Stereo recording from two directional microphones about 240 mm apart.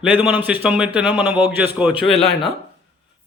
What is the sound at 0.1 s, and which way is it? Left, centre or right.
A man's voice, centre.